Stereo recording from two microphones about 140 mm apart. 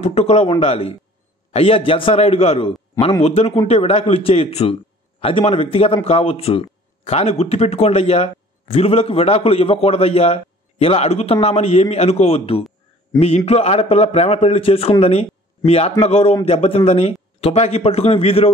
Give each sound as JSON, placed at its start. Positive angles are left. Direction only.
{"t": 0.0, "sound": "a man's voice", "side_deg": 50}